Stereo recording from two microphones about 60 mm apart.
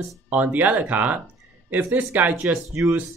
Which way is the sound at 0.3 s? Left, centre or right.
Right.